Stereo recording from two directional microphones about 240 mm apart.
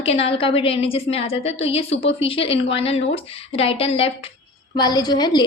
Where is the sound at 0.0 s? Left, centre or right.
Left.